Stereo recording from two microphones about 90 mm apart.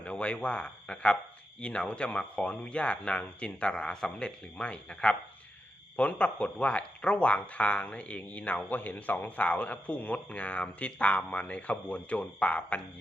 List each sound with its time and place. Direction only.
0.0 s speech: 15° left (ahead or behind)